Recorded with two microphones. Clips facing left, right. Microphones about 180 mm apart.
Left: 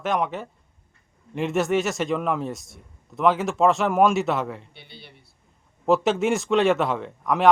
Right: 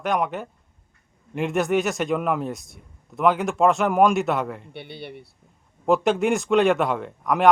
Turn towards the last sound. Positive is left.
turn(degrees=0)  # may be behind; listen again after turning